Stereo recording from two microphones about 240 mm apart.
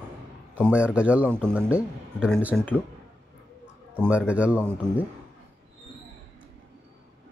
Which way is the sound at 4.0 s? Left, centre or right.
Centre.